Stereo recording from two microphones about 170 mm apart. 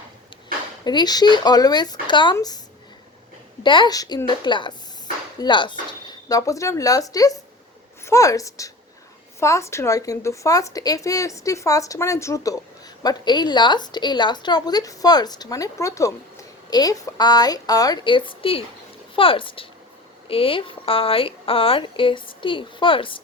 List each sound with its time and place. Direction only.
0.9 s a woman's voice: 25° left (ahead or behind)
3.6 s a woman's voice: 30° left (ahead or behind)